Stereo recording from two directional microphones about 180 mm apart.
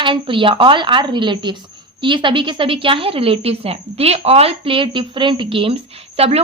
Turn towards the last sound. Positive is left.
turn(degrees=-35)  # may be behind; listen again after turning